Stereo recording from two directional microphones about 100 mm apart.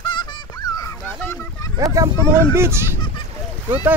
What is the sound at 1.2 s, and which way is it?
Speech, 25° left (ahead or behind).